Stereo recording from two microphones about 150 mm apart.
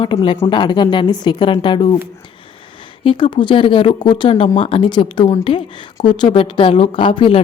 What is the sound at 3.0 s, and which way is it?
A woman's voice, 35° left (ahead or behind).